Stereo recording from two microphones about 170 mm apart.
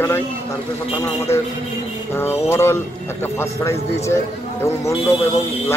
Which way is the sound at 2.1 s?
15° left (ahead or behind).